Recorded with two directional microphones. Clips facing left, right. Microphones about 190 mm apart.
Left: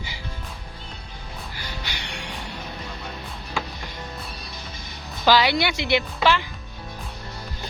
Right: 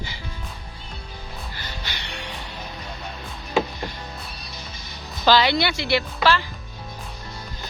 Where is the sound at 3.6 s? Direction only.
20° right (ahead or behind).